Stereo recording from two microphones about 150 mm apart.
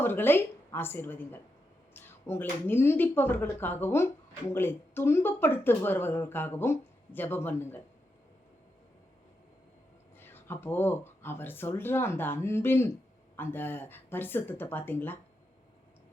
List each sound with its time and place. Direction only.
0.0 s speech: 15° left (ahead or behind)
10.2 s speech: 15° left (ahead or behind)